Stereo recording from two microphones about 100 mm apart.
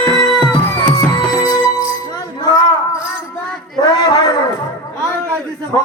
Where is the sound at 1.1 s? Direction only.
35° left (ahead or behind).